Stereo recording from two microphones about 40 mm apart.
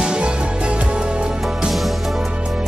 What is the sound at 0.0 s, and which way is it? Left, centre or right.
Music, right.